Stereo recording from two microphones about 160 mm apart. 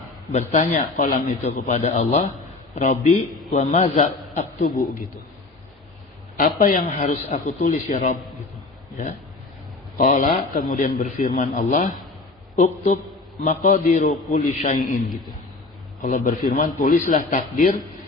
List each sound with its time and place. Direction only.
0.3 s speech: 50° left (ahead or behind)
1.6 s speech: 45° left (ahead or behind)
4.6 s a man's voice: 65° left (ahead or behind)
6.3 s a man's voice: 60° left (ahead or behind)
7.3 s speech: 50° left (ahead or behind)
10.0 s speech: 55° left (ahead or behind)
16.0 s a man's voice: 55° left (ahead or behind)